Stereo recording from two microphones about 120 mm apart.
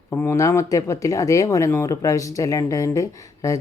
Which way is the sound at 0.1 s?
20° left (ahead or behind).